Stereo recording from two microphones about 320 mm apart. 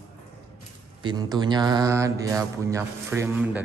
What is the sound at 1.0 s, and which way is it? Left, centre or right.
Speech, centre.